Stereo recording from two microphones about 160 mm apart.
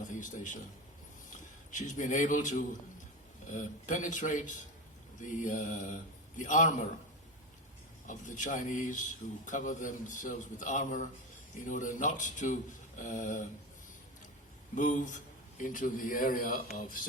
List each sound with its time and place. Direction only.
0.1 s a man's voice: 55° left (ahead or behind)
8.0 s a man's voice: 55° left (ahead or behind)
14.8 s a man's voice: 50° left (ahead or behind)